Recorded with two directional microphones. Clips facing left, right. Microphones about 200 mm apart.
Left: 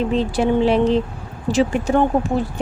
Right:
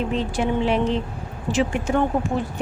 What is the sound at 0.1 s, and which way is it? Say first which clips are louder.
A woman's voice: left 5 dB; 35° left (ahead or behind).